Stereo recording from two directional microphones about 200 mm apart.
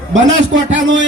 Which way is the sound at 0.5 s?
70° right (ahead or behind).